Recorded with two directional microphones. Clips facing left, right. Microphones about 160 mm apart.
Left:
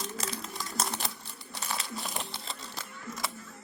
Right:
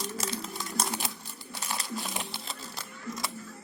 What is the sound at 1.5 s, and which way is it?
Crumpling, centre (ahead or behind).